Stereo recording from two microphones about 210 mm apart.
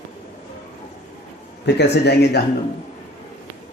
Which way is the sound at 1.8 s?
50° left (ahead or behind).